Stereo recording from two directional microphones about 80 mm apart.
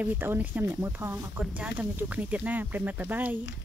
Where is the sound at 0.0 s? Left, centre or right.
Right.